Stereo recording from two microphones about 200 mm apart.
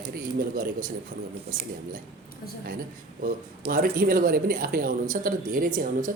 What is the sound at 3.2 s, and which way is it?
Speech, 45° right (ahead or behind).